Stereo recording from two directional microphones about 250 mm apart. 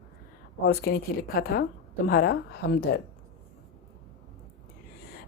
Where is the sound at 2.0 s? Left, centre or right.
Left.